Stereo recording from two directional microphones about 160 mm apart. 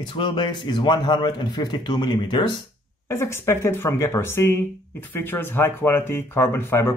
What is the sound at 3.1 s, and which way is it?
Speech, 15° left (ahead or behind).